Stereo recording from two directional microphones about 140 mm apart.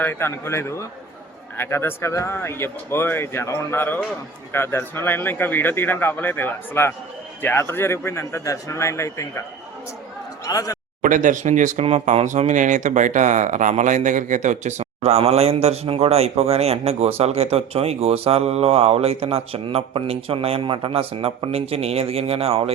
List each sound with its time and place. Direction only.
0.0 s a man's voice: 15° left (ahead or behind)
10.4 s speech: 25° left (ahead or behind)
11.0 s speech: 65° right (ahead or behind); by 22.7 s 45° right (ahead or behind)